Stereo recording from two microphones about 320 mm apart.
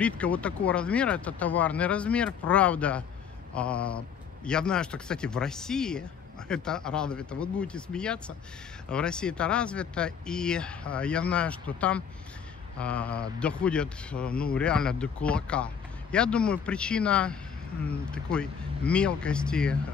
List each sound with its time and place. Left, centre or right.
0.0 s a man's voice: centre